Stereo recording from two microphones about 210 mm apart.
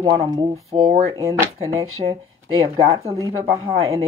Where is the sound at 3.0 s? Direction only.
15° right (ahead or behind).